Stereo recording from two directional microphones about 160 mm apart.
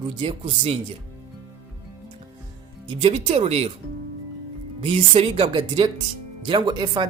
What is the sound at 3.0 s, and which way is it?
Speech, 40° right (ahead or behind).